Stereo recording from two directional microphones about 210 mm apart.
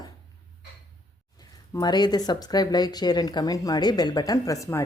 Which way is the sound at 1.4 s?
20° left (ahead or behind).